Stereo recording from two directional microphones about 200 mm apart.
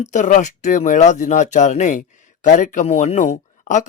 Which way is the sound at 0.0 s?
35° left (ahead or behind).